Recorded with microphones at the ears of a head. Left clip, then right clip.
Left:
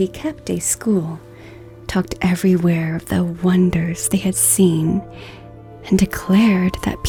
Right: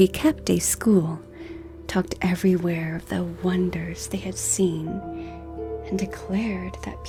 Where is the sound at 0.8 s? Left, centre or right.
Centre.